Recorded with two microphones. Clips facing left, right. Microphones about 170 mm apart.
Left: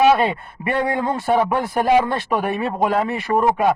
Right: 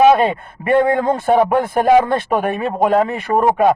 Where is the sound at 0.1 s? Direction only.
45° right (ahead or behind).